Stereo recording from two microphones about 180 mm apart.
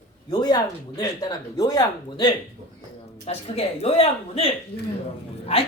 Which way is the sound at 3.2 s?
35° left (ahead or behind).